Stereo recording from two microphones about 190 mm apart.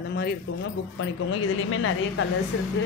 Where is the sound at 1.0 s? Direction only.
90° left.